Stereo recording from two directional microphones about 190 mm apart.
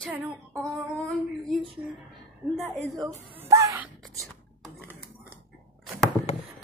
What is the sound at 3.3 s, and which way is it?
Wail, 15° right (ahead or behind).